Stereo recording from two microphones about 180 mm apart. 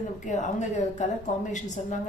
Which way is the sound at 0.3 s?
40° left (ahead or behind).